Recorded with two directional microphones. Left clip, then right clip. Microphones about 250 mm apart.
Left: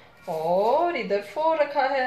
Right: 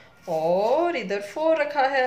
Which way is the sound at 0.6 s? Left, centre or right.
Right.